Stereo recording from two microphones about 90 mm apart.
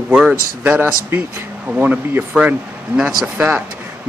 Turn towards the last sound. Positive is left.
turn(degrees=-20)  # may be behind; listen again after turning